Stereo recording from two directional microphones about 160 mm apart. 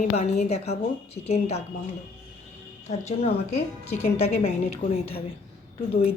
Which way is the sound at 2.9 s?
40° left (ahead or behind).